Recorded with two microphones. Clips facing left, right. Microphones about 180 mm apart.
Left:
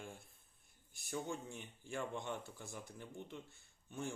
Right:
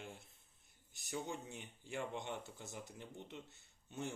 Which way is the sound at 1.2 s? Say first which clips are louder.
Left 1 dB; 20° right (ahead or behind).